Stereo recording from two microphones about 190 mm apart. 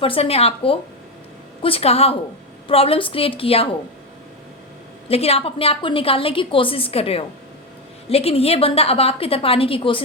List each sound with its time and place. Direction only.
0.0 s a woman's voice: 30° left (ahead or behind)
5.0 s a woman's voice: 30° left (ahead or behind)